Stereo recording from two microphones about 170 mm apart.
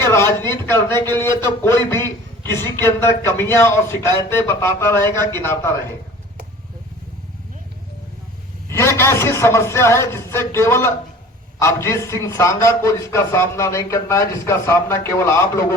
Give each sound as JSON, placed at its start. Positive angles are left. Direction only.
{"t": 0.0, "sound": "speech", "side_deg": 15}
{"t": 8.7, "sound": "speech", "side_deg": 15}